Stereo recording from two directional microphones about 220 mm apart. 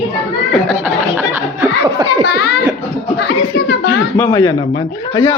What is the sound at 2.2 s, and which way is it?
A child's voice, 45° left (ahead or behind).